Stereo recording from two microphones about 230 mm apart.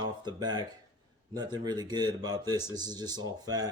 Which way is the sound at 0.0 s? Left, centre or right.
Centre.